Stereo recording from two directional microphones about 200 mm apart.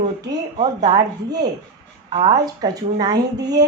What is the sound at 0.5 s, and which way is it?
Speech, 25° right (ahead or behind).